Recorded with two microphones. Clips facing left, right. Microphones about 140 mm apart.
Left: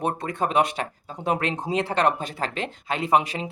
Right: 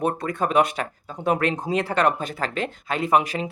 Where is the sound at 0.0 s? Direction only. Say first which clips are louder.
Right 2 dB; 30° left (ahead or behind).